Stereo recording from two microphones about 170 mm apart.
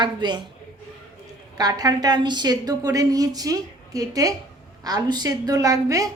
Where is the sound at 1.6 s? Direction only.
20° right (ahead or behind).